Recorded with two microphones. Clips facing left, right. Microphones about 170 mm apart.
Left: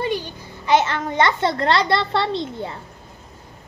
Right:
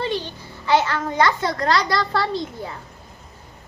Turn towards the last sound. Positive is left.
turn(degrees=25)  # may be behind; listen again after turning